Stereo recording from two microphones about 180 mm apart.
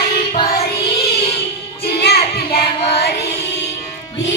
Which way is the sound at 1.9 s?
60° left (ahead or behind).